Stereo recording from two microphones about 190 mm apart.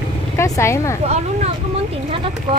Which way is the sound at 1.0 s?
35° right (ahead or behind).